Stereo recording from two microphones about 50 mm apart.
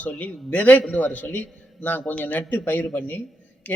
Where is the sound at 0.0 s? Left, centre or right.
Left.